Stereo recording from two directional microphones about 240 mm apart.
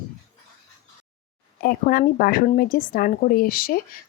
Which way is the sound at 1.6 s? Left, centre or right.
Left.